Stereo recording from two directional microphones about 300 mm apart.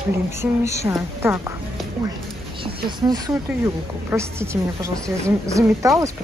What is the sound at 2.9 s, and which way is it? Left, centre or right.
A woman's voice, centre.